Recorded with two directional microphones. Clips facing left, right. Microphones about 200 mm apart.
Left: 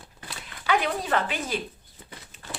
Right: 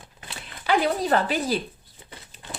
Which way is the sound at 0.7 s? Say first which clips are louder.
Right 4 dB; 35° right (ahead or behind).